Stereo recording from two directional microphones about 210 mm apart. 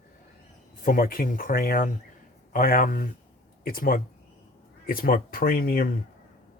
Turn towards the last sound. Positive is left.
turn(degrees=45)  # may be behind; listen again after turning